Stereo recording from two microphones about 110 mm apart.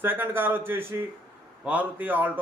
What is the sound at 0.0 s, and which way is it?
Speech, 20° right (ahead or behind).